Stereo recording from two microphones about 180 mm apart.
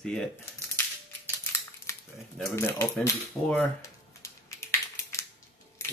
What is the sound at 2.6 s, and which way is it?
Speech, 15° left (ahead or behind).